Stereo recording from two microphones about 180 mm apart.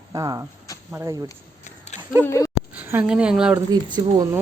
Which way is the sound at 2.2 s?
15° left (ahead or behind).